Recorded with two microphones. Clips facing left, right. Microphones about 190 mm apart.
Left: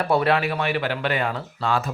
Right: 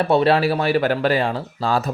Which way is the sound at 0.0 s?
25° right (ahead or behind).